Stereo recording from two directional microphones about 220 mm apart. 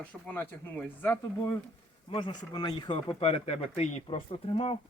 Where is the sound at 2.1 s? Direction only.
20° left (ahead or behind).